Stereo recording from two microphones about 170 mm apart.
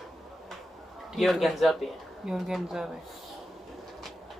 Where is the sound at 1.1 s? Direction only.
Centre (ahead or behind).